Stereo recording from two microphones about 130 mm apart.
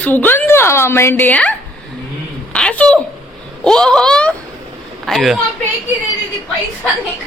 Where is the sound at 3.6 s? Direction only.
5° left (ahead or behind).